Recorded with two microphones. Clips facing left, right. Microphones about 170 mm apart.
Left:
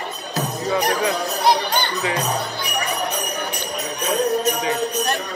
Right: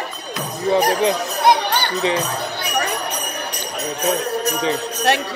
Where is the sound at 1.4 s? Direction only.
55° right (ahead or behind).